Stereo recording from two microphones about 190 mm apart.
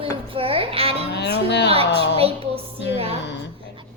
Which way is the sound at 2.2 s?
30° right (ahead or behind).